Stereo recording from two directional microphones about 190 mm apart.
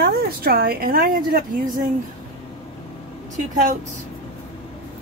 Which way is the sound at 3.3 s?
40° right (ahead or behind).